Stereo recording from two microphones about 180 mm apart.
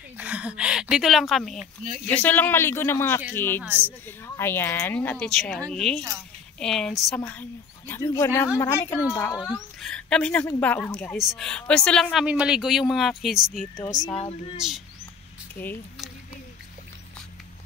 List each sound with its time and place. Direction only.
0.2 s a woman's voice: 5° right (ahead or behind); by 3.6 s 10° left (ahead or behind)
3.6 s a woman's voice: 10° right (ahead or behind)
4.4 s a woman's voice: 10° left (ahead or behind)
9.8 s a woman's voice: 5° left (ahead or behind)
13.8 s speech: 20° left (ahead or behind)
14.6 s a woman's voice: 5° right (ahead or behind)
15.6 s a woman's voice: 10° left (ahead or behind)